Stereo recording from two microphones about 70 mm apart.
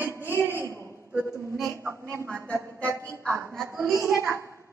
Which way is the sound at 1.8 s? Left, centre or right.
Right.